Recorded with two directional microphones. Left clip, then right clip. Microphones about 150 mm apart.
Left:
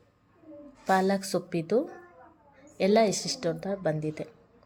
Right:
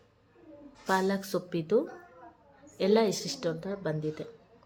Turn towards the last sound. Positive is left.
turn(degrees=20)  # may be behind; listen again after turning